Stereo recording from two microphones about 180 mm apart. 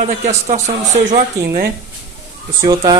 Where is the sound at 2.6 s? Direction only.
20° right (ahead or behind).